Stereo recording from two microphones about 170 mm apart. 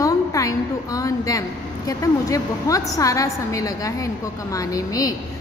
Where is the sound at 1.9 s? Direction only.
20° left (ahead or behind).